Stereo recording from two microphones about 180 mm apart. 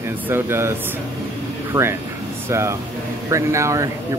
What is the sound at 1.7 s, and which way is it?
Speech, 20° right (ahead or behind).